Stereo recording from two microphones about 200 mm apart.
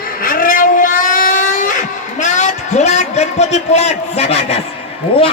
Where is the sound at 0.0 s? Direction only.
45° left (ahead or behind); by 4.6 s 30° left (ahead or behind).